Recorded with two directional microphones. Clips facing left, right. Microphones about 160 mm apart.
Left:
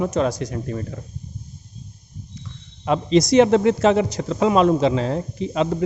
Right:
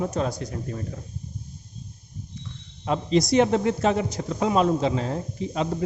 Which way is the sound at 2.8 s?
85° left.